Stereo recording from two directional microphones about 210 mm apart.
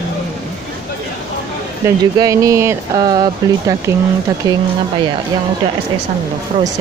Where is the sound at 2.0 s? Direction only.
15° right (ahead or behind).